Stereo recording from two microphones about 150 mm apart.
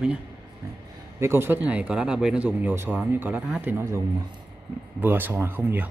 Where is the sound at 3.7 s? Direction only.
20° right (ahead or behind).